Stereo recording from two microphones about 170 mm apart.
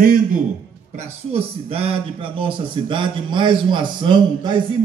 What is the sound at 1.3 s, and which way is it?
Speech, 35° right (ahead or behind).